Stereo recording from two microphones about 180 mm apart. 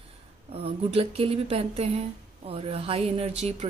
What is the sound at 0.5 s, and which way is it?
A woman's voice, 30° right (ahead or behind).